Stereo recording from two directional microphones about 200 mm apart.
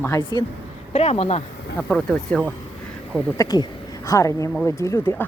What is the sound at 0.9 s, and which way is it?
Speech, 30° left (ahead or behind).